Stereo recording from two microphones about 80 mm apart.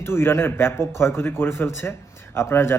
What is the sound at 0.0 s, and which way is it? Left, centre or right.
Speech, left.